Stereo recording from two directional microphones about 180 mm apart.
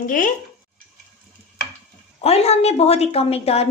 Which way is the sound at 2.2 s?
35° left (ahead or behind).